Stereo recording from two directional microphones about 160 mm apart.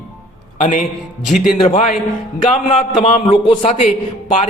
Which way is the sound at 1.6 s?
50° left (ahead or behind).